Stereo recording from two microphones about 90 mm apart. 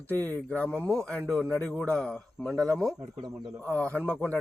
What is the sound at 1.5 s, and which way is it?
Speech, 20° left (ahead or behind).